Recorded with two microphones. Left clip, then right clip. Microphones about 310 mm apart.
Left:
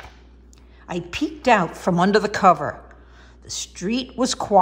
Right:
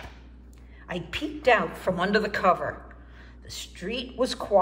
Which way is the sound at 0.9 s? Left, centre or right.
Centre.